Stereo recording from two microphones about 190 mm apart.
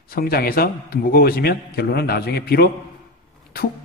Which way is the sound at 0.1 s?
50° left (ahead or behind).